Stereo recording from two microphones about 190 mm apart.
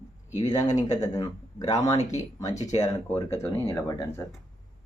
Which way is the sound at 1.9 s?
35° left (ahead or behind).